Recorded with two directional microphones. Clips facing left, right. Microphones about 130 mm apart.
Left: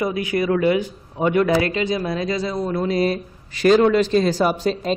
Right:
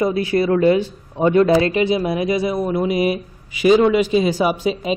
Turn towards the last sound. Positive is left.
turn(degrees=-5)  # may be behind; listen again after turning